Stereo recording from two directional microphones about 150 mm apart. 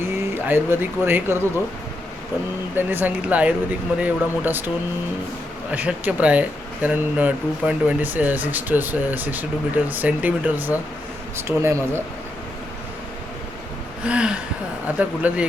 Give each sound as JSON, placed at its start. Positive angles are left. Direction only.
{"t": 0.0, "sound": "speech", "side_deg": -15}
{"t": 2.7, "sound": "speech", "side_deg": -15}
{"t": 5.7, "sound": "speech", "side_deg": -10}
{"t": 14.0, "sound": "speech", "side_deg": -5}